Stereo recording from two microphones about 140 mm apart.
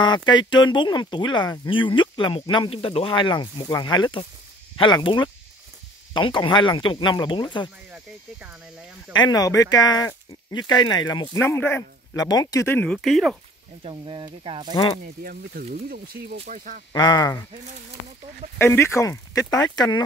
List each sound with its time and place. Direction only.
0.0 s speech: 30° left (ahead or behind)
7.9 s speech: 10° right (ahead or behind)
9.1 s speech: 30° left (ahead or behind)
11.3 s speech: 15° left (ahead or behind); by 13.4 s centre (ahead or behind)
13.8 s speech: 40° right (ahead or behind)
15.2 s speech: 90° right
16.4 s speech: 70° right (ahead or behind)
16.9 s speech: 30° left (ahead or behind)
18.6 s speech: 20° left (ahead or behind)